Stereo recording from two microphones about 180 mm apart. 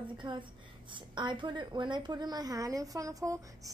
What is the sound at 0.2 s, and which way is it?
A woman's voice, 25° right (ahead or behind).